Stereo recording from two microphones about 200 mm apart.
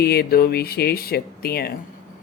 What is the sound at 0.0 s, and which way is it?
Speech, 50° left (ahead or behind).